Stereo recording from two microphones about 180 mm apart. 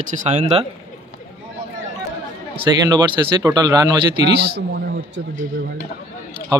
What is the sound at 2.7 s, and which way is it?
Speech, 20° right (ahead or behind).